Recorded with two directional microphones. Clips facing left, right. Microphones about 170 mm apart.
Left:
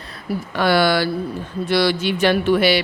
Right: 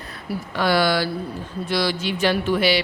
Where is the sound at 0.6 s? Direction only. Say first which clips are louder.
Left 3 dB; 65° left (ahead or behind).